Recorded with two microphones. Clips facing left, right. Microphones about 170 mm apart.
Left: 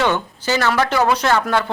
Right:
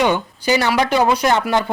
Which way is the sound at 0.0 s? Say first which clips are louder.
Right 2 dB; 15° right (ahead or behind).